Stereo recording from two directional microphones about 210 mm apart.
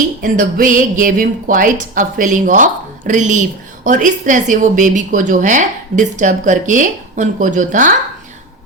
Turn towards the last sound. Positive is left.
turn(degrees=-40)  # may be behind; listen again after turning